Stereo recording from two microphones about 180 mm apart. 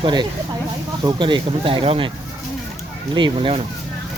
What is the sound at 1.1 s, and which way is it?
Speech, 25° right (ahead or behind).